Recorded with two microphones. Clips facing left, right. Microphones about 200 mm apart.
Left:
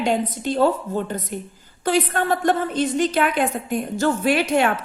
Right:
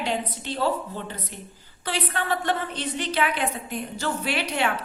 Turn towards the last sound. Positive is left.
turn(degrees=45)  # may be behind; listen again after turning